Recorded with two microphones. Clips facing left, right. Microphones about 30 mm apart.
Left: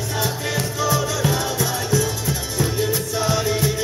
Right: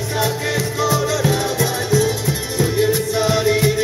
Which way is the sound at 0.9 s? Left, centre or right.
Centre.